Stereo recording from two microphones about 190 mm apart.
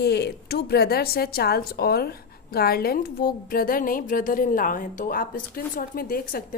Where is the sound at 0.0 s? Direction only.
60° left (ahead or behind).